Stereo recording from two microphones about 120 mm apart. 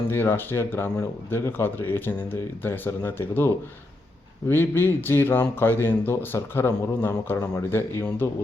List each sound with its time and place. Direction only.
0.1 s speech: 20° left (ahead or behind)